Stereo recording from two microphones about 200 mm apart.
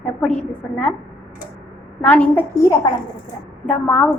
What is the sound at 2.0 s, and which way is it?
A woman's voice, 5° left (ahead or behind).